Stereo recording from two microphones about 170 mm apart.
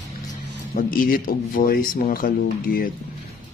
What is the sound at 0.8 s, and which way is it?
Speech, 55° left (ahead or behind).